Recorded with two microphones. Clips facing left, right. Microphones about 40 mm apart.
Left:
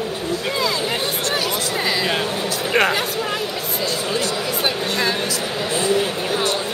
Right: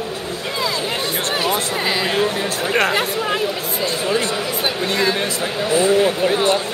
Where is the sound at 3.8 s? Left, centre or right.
Right.